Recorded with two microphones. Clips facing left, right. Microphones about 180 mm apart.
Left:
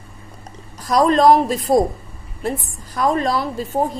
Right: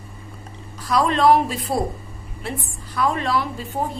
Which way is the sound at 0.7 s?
40° left (ahead or behind).